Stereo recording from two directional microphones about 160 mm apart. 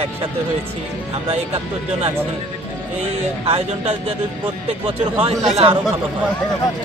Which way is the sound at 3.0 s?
35° right (ahead or behind).